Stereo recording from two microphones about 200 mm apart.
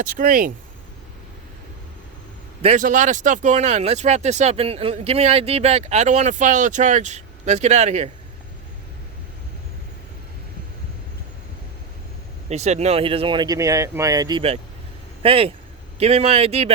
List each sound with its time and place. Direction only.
0.0 s speech: 45° right (ahead or behind)
2.6 s speech: 35° right (ahead or behind)
12.5 s speech: 35° right (ahead or behind)